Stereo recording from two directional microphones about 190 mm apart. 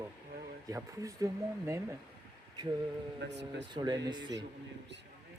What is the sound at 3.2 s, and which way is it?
Speech, 65° right (ahead or behind).